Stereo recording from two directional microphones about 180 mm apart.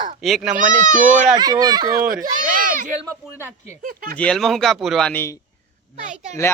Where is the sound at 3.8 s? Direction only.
50° right (ahead or behind).